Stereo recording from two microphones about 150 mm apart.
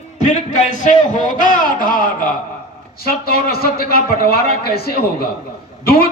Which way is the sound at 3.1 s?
90° left.